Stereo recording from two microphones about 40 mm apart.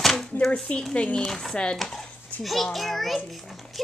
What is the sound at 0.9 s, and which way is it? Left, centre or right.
Speech, left.